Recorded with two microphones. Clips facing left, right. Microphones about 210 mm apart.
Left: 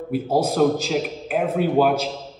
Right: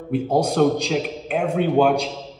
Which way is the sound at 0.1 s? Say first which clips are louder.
Right 1 dB; 5° left (ahead or behind).